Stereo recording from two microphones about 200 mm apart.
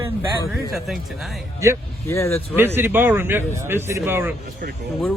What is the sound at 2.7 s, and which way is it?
Speech, 10° right (ahead or behind).